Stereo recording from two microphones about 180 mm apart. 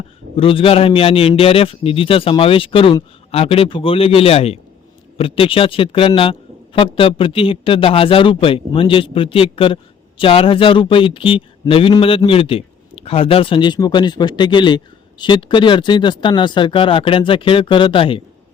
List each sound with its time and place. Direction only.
0.3 s a man's voice: 30° left (ahead or behind)